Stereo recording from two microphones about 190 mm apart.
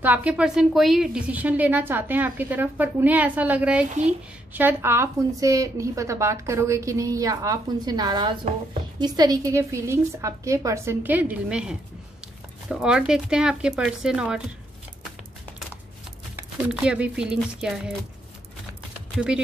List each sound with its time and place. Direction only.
0.0 s a woman's voice: 5° right (ahead or behind)
16.3 s speech: 5° right (ahead or behind)
19.1 s speech: 5° right (ahead or behind)